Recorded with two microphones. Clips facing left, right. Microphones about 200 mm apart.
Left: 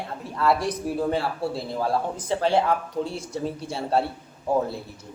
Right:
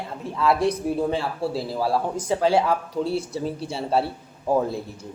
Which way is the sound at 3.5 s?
Centre (ahead or behind).